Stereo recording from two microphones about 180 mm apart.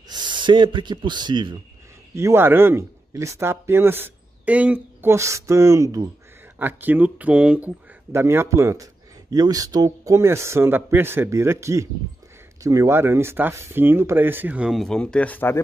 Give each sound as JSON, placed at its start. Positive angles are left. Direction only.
{"t": 0.1, "sound": "speech", "side_deg": -25}
{"t": 2.1, "sound": "speech", "side_deg": -15}